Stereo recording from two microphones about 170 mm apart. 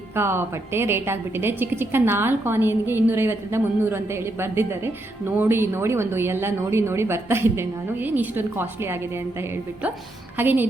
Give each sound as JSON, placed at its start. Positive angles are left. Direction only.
{"t": 0.2, "sound": "a woman's voice", "side_deg": -15}
{"t": 10.3, "sound": "a woman's voice", "side_deg": -10}